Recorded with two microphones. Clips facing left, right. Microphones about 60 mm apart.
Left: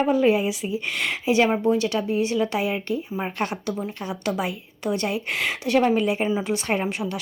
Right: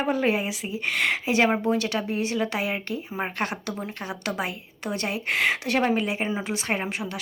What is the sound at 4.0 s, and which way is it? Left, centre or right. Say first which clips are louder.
A woman's voice: left 1 dB; right.